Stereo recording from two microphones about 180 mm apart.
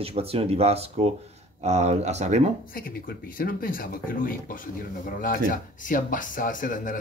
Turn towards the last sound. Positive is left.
turn(degrees=45)  # may be behind; listen again after turning